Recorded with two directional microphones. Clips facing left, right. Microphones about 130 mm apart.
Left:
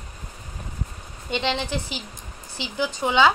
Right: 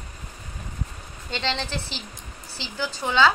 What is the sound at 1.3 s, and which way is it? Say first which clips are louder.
A woman's voice: left 3 dB; 15° left (ahead or behind).